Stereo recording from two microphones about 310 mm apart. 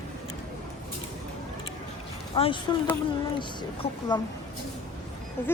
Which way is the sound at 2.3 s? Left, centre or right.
Centre.